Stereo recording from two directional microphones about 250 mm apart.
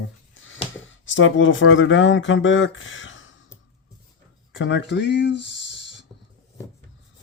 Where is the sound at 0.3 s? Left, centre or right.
Left.